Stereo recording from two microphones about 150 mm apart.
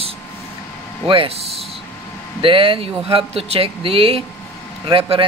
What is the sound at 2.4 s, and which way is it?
Speech, 35° right (ahead or behind).